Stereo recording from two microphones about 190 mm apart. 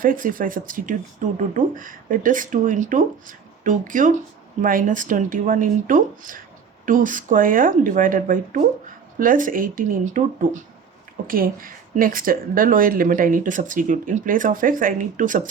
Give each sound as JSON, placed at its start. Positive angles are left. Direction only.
{"t": 0.0, "sound": "speech", "side_deg": -45}